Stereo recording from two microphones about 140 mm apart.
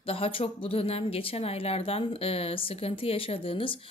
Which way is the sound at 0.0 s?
40° left (ahead or behind).